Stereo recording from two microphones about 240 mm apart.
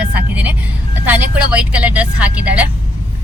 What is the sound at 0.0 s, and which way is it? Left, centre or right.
Vehicle, centre.